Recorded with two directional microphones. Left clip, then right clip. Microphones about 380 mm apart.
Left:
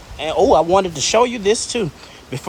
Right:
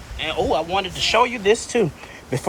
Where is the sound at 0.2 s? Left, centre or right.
Centre.